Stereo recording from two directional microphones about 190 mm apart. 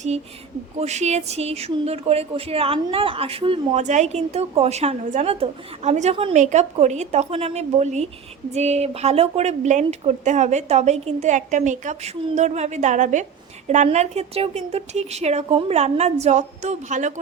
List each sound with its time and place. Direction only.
0.8 s speech: 35° right (ahead or behind)